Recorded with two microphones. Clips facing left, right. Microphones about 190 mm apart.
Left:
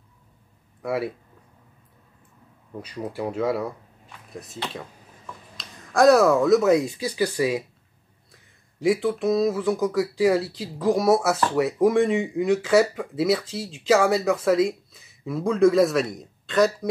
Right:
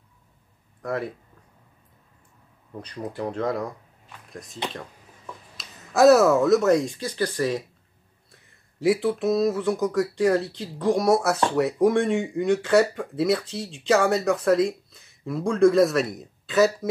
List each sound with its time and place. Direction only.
0.8 s speech: 10° left (ahead or behind)
2.8 s speech: 10° left (ahead or behind)
5.6 s speech: 5° right (ahead or behind)